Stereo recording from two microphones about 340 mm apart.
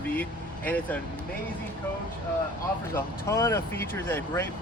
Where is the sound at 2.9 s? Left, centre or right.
Centre.